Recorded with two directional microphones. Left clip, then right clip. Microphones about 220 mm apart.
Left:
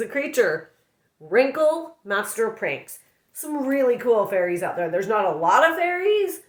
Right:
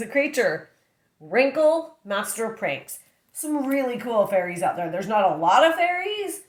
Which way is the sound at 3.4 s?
15° left (ahead or behind).